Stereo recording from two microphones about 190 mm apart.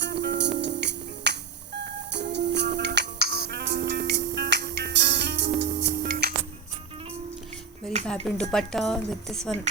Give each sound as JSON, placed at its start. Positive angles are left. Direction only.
{"t": 0.0, "sound": "music", "side_deg": -65}
{"t": 8.0, "sound": "speech", "side_deg": 5}